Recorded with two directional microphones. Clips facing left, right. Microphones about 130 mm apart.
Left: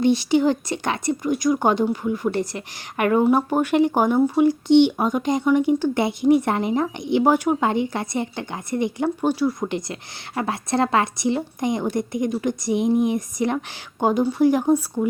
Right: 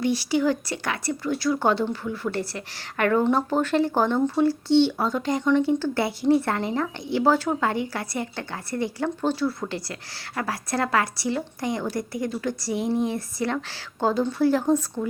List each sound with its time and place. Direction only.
0.0 s a woman's voice: 20° left (ahead or behind)